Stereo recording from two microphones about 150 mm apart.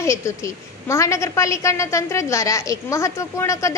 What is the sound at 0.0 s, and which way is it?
A woman's voice, 20° left (ahead or behind).